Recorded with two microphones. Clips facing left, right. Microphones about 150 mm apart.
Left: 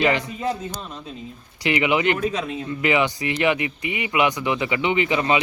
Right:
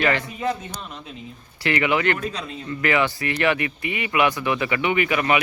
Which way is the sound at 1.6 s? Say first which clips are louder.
Left 1 dB; 20° left (ahead or behind).